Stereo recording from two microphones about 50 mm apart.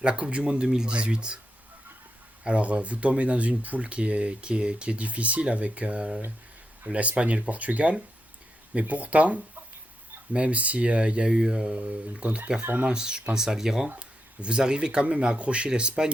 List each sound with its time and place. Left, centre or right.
0.0 s speech: right
2.4 s speech: right
12.6 s speech: right
12.9 s speech: centre